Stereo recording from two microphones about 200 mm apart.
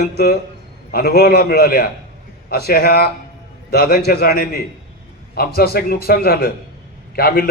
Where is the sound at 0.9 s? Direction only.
50° left (ahead or behind).